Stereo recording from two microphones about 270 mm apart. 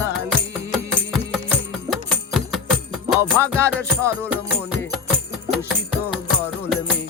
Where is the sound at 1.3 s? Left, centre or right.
Centre.